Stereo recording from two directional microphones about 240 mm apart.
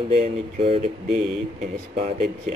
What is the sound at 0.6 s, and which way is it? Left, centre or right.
Speech, right.